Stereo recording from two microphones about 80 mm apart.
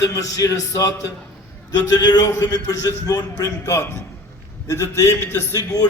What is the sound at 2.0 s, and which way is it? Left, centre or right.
A man's voice, left.